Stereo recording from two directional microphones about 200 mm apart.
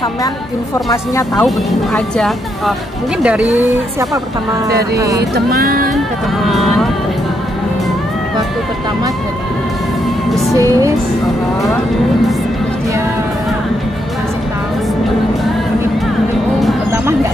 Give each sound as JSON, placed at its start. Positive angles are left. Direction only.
{"t": 1.3, "sound": "speech", "side_deg": 5}
{"t": 4.9, "sound": "speech", "side_deg": -15}
{"t": 5.3, "sound": "speech", "side_deg": -50}
{"t": 6.4, "sound": "speech", "side_deg": 0}
{"t": 10.5, "sound": "speech", "side_deg": -15}
{"t": 16.9, "sound": "a sound", "side_deg": -15}